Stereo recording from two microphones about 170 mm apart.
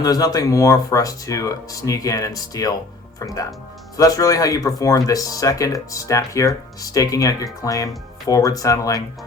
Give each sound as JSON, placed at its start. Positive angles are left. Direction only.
{"t": 0.0, "sound": "speech", "side_deg": 20}